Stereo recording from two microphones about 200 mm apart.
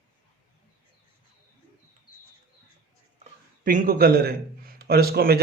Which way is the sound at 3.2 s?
40° right (ahead or behind).